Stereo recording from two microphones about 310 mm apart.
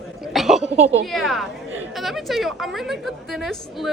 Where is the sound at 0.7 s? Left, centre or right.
Centre.